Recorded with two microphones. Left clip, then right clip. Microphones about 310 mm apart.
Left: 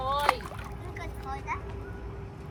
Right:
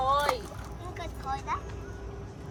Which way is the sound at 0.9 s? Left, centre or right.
Right.